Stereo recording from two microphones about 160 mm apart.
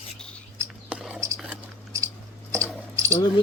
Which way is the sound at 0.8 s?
5° right (ahead or behind).